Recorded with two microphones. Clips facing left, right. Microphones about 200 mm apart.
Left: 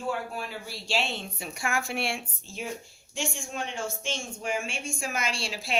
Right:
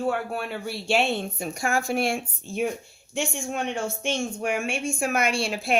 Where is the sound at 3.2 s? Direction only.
60° right (ahead or behind).